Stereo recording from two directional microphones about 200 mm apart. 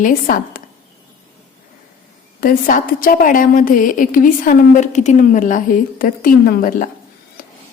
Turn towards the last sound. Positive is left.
turn(degrees=45)  # may be behind; listen again after turning